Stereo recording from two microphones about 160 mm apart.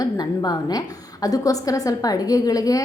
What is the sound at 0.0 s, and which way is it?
A woman's voice, 25° left (ahead or behind).